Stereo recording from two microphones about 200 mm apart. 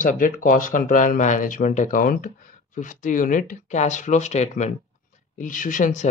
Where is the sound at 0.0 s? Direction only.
40° left (ahead or behind).